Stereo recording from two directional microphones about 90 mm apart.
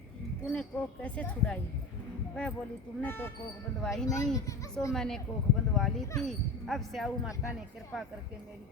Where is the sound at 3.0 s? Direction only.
20° left (ahead or behind).